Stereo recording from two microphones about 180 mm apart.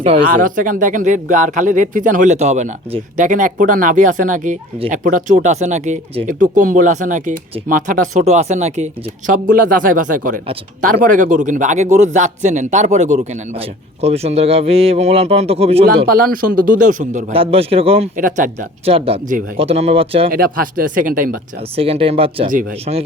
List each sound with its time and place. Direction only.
0.3 s a man's voice: 50° right (ahead or behind); by 16.0 s 35° right (ahead or behind)
16.0 s speech: 55° right (ahead or behind)
17.3 s a man's voice: 30° right (ahead or behind)
18.2 s speech: 45° right (ahead or behind)
18.9 s a man's voice: 30° right (ahead or behind)
20.3 s speech: 50° right (ahead or behind)
21.8 s a man's voice: 30° right (ahead or behind)